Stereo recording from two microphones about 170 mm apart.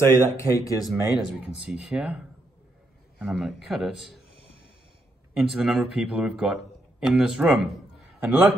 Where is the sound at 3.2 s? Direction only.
Centre (ahead or behind).